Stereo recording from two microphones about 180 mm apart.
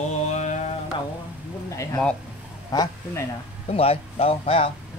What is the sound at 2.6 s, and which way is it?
Speech, 20° left (ahead or behind).